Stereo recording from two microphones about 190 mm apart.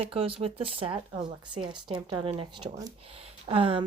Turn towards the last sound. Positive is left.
turn(degrees=-30)  # may be behind; listen again after turning